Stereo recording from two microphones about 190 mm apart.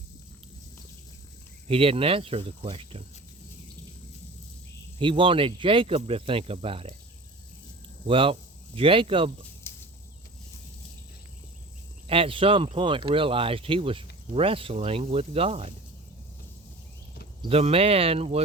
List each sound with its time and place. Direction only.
1.6 s speech: 30° right (ahead or behind)
4.9 s speech: 25° right (ahead or behind)
8.0 s speech: 30° right (ahead or behind)
9.7 s a sound: 15° left (ahead or behind)
12.0 s speech: 30° right (ahead or behind)
17.4 s speech: 30° right (ahead or behind)